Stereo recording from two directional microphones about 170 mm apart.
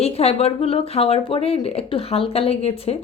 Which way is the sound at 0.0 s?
35° left (ahead or behind).